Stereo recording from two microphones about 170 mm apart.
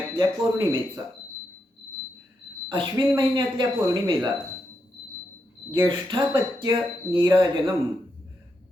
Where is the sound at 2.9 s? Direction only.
25° right (ahead or behind).